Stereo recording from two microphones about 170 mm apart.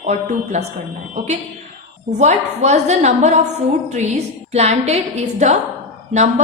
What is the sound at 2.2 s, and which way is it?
A woman's voice, 40° right (ahead or behind).